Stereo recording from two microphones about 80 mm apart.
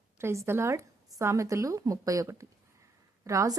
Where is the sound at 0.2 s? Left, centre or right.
Right.